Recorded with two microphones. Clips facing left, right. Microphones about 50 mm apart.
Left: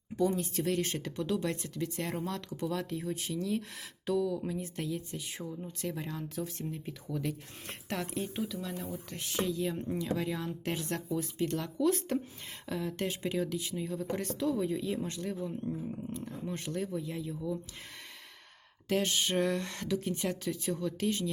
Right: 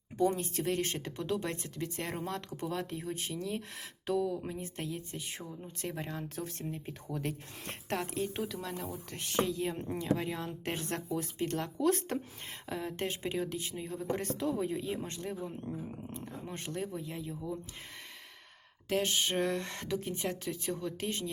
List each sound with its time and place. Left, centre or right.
0.3 s speech: right
6.2 s speech: right
8.5 s speech: right
12.6 s speech: right
19.0 s speech: right